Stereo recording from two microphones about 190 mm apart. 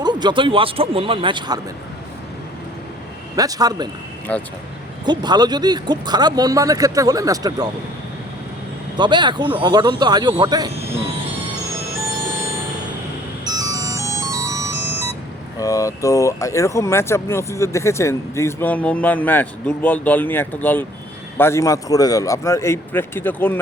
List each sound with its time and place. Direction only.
0.0 s speech: 25° right (ahead or behind)
3.3 s speech: 20° right (ahead or behind)
4.3 s speech: 5° left (ahead or behind)
5.0 s speech: 20° right (ahead or behind)
9.0 s speech: 25° right (ahead or behind)
12.0 s music: 15° right (ahead or behind)
15.5 s speech: 20° left (ahead or behind)